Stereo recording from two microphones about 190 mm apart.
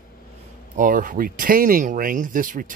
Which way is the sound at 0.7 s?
45° right (ahead or behind).